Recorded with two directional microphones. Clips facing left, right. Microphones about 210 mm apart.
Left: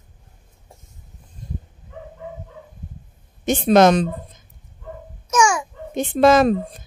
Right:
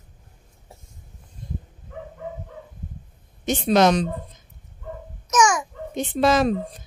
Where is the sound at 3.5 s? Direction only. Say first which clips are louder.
Left 4 dB; 50° left (ahead or behind).